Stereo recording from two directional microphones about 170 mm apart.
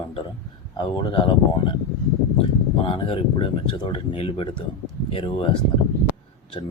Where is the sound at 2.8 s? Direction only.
30° left (ahead or behind).